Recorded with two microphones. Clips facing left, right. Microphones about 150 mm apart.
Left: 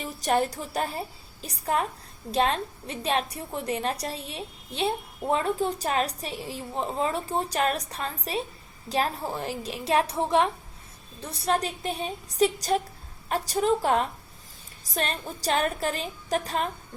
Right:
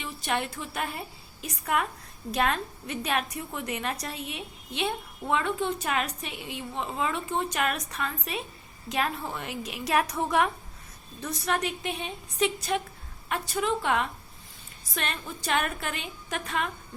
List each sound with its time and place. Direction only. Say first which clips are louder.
0.0 s a woman's voice: left 6 dB; 40° left (ahead or behind)